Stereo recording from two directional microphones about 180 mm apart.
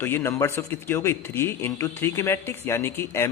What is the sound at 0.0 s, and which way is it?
Speech, 10° left (ahead or behind).